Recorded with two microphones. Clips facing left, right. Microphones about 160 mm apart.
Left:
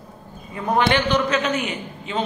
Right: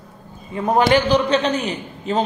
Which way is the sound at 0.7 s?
35° right (ahead or behind).